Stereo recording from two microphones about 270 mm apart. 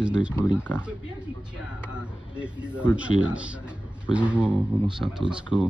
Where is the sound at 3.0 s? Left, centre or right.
Centre.